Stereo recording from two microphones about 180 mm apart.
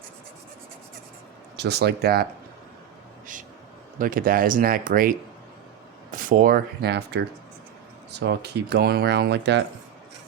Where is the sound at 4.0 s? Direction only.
50° right (ahead or behind).